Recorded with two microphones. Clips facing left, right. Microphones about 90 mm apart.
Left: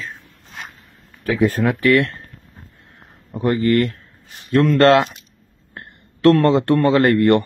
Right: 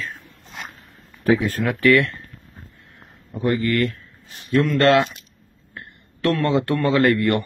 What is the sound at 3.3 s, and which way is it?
A man's voice, 30° left (ahead or behind).